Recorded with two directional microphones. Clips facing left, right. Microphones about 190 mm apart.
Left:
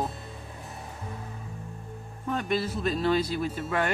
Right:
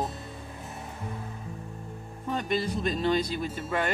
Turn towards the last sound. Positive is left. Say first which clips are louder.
# left 2 dB
turn(degrees=10)  # may be behind; listen again after turning